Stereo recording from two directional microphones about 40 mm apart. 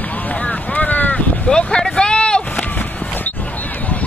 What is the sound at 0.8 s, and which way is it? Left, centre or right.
Boat, left.